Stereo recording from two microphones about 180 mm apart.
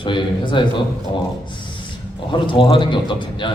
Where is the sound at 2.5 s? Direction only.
25° left (ahead or behind).